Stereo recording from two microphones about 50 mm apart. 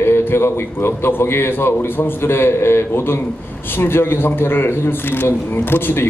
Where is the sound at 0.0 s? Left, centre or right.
Left.